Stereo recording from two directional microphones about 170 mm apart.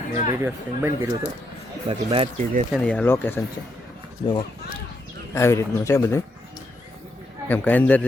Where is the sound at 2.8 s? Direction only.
5° left (ahead or behind).